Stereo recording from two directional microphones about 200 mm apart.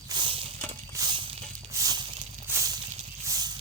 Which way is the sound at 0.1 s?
25° right (ahead or behind).